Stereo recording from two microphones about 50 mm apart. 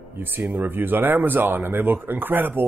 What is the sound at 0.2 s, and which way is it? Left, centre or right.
Speech, right.